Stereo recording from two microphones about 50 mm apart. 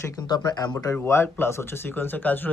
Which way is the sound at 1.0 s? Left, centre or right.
Left.